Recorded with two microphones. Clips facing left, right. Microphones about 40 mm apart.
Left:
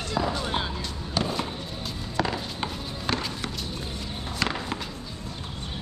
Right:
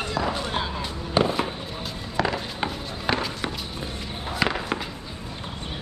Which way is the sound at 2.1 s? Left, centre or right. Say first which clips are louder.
Right 3 dB; centre.